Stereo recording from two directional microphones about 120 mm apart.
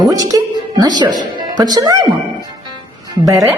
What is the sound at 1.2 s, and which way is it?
Speech, 35° right (ahead or behind).